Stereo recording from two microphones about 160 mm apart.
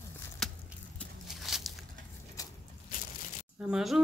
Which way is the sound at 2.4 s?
20° left (ahead or behind).